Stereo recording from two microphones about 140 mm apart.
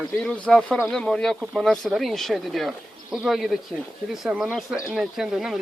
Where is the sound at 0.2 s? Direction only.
5° left (ahead or behind).